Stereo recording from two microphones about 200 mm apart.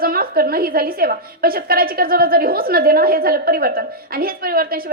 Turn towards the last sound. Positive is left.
turn(degrees=-50)  # may be behind; listen again after turning